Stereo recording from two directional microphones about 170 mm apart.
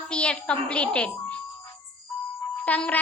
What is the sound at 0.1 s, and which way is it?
A child's voice, 5° left (ahead or behind).